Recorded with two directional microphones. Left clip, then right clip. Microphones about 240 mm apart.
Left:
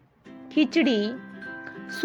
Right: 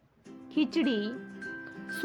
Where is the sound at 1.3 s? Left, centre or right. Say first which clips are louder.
Left 2 dB; centre.